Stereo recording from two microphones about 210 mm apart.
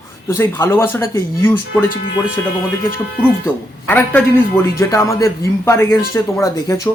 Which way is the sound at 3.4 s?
10° left (ahead or behind).